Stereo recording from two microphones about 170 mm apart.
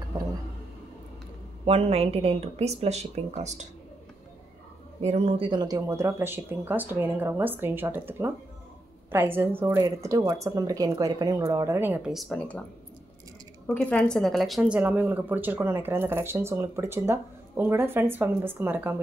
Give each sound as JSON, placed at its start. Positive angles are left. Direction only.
{"t": 1.7, "sound": "speech", "side_deg": -35}
{"t": 5.0, "sound": "speech", "side_deg": -35}
{"t": 13.7, "sound": "speech", "side_deg": 10}